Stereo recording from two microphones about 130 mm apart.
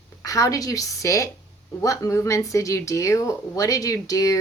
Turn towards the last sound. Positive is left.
turn(degrees=25)  # may be behind; listen again after turning